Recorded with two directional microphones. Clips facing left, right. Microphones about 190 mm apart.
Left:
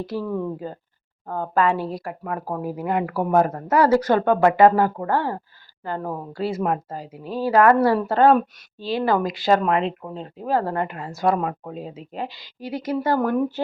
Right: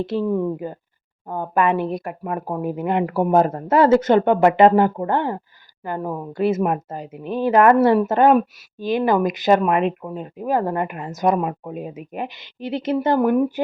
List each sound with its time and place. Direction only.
0.0 s a woman's voice: 25° right (ahead or behind)
13.1 s speech: 10° right (ahead or behind)